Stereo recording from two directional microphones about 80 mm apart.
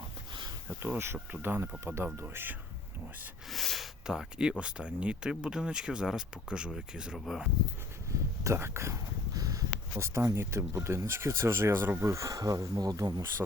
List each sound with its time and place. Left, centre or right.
0.9 s speech: right
3.5 s a sound: centre
4.0 s speech: centre
8.1 s speech: right
9.3 s speech: right